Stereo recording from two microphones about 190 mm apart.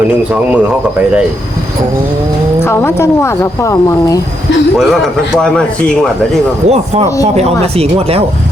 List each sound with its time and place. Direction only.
2.6 s speech: 15° left (ahead or behind)
5.4 s speech: 5° left (ahead or behind)
6.7 s speech: 35° right (ahead or behind)